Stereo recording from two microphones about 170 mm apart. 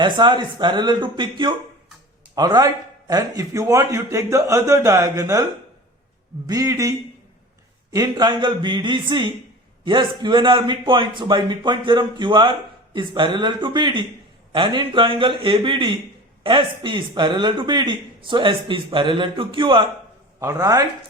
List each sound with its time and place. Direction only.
0.0 s a man's voice: 25° right (ahead or behind)
6.5 s a man's voice: 20° right (ahead or behind)
7.9 s a man's voice: 20° right (ahead or behind)